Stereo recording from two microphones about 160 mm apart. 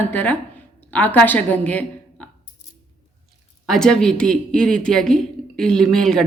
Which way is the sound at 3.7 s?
5° left (ahead or behind).